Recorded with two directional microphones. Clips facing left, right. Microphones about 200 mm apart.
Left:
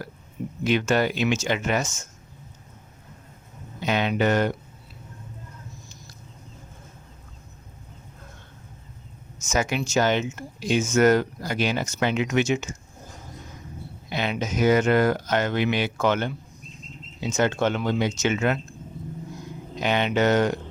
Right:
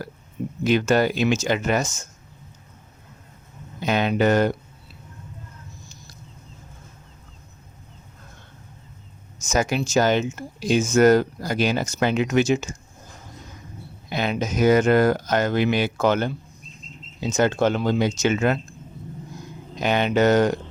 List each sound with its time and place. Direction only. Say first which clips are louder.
0.6 s speech: right 3 dB; 40° right (ahead or behind)
3.8 s speech: right 3 dB; 45° right (ahead or behind)
9.4 s speech: right 3 dB; 35° right (ahead or behind)
14.1 s speech: right 3 dB; 45° right (ahead or behind)
19.8 s speech: right 3 dB; 45° right (ahead or behind)